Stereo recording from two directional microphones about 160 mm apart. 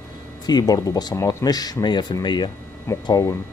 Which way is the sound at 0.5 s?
25° left (ahead or behind).